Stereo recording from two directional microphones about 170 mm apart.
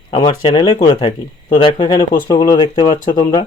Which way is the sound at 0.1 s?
30° left (ahead or behind).